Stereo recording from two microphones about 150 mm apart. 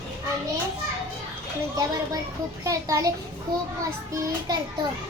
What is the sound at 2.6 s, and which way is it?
Speech, 20° right (ahead or behind).